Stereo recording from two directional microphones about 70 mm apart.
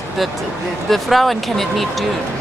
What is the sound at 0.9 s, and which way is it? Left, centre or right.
A woman's voice, centre.